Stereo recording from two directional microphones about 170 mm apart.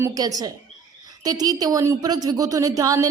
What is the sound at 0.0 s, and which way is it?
A woman's voice, 20° right (ahead or behind).